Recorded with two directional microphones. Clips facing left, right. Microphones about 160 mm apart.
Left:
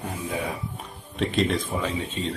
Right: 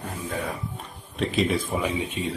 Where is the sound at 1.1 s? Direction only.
Centre (ahead or behind).